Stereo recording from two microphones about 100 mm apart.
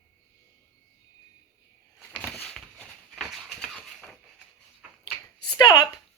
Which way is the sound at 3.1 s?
5° right (ahead or behind).